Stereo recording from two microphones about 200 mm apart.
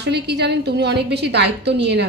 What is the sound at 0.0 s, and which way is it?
A woman's voice, 55° right (ahead or behind).